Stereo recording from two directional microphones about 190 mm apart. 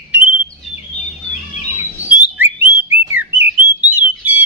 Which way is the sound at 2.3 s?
10° right (ahead or behind).